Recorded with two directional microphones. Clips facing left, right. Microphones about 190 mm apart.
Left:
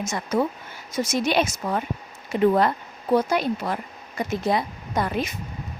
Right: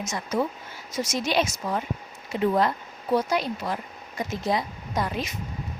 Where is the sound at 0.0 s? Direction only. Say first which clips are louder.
Left 3 dB; 55° left (ahead or behind).